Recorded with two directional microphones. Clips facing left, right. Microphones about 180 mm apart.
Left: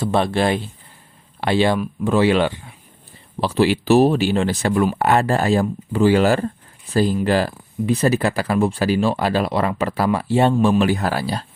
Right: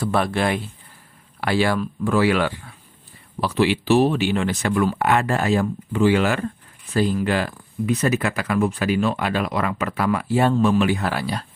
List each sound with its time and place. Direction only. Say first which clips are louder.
0.0 s speech: left 3 dB; 25° left (ahead or behind)